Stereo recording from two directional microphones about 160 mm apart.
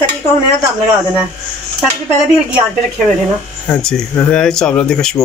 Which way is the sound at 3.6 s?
5° left (ahead or behind).